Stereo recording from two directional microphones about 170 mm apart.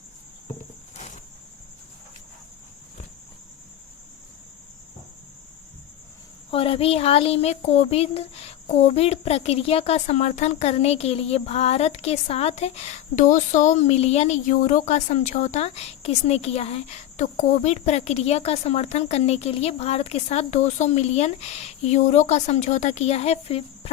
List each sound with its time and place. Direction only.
0.9 s insect: 45° left (ahead or behind)
6.5 s speech: 35° left (ahead or behind)